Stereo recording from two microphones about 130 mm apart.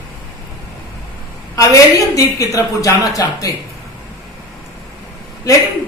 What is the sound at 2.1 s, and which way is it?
A woman's voice, 25° left (ahead or behind).